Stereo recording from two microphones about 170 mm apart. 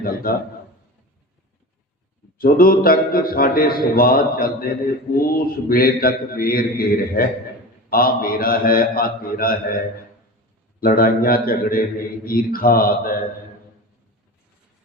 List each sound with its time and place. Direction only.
0.0 s a man's voice: 60° left (ahead or behind)
2.4 s a man's voice: 60° left (ahead or behind)
10.8 s a man's voice: 60° left (ahead or behind)